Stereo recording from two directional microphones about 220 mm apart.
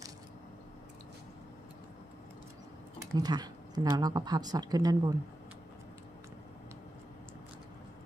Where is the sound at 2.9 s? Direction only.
15° right (ahead or behind).